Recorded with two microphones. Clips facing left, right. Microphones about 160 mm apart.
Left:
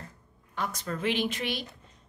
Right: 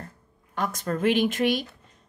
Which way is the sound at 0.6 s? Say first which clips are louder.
Right 6 dB; 50° right (ahead or behind).